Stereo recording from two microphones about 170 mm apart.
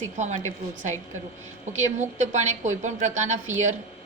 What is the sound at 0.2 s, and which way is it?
A woman's voice, 45° right (ahead or behind).